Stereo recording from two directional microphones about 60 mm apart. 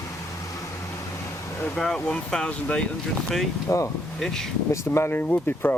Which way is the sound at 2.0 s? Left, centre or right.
Centre.